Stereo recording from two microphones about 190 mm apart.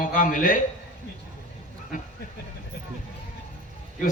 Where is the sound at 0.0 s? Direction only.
45° left (ahead or behind).